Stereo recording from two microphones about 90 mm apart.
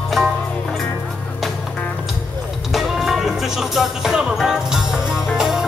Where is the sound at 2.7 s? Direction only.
5° right (ahead or behind).